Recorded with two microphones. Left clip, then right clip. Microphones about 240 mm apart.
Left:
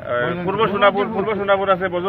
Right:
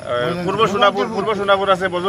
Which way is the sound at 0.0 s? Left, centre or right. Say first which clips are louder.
Right 1 dB; centre.